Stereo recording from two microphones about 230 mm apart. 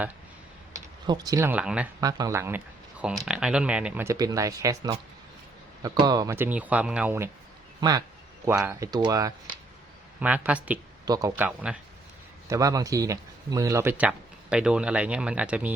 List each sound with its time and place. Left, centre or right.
1.0 s speech: centre